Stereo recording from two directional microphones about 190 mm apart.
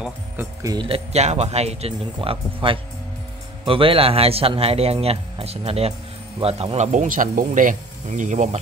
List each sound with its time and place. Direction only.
0.0 s speech: 15° right (ahead or behind)
0.8 s speech: 30° right (ahead or behind)